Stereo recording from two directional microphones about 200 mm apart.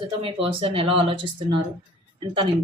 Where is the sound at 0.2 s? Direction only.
30° right (ahead or behind).